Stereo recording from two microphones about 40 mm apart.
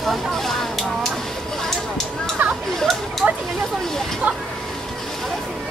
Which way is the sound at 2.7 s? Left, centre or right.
Centre.